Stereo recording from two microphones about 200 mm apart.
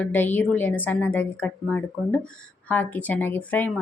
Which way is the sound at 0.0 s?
10° left (ahead or behind).